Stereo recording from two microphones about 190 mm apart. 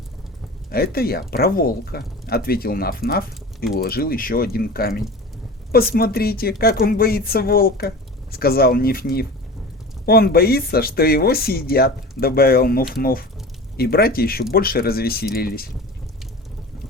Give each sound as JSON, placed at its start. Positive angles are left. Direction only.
{"t": 0.7, "sound": "speech", "side_deg": 55}